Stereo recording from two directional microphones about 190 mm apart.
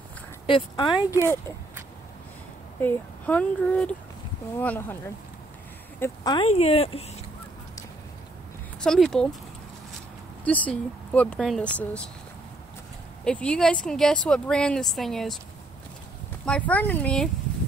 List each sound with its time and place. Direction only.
0.5 s speech: 25° left (ahead or behind)
2.8 s speech: 10° left (ahead or behind)
6.3 s speech: 30° left (ahead or behind)
8.8 s a woman's voice: 5° left (ahead or behind)
10.4 s speech: 5° left (ahead or behind)
13.2 s a woman's voice: 5° left (ahead or behind)
16.4 s speech: 5° left (ahead or behind)